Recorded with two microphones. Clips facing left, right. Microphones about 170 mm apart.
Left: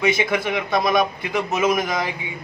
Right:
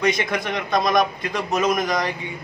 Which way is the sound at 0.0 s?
5° left (ahead or behind).